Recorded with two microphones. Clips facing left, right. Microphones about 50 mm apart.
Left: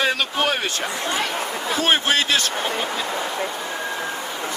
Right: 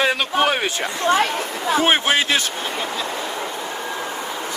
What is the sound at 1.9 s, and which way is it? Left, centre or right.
Speech, centre.